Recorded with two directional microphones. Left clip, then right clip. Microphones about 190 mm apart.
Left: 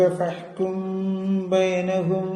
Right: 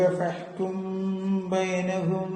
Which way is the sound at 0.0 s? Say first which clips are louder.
Left 3 dB; 25° left (ahead or behind).